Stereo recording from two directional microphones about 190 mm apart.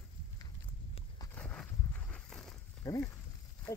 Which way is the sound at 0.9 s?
20° left (ahead or behind).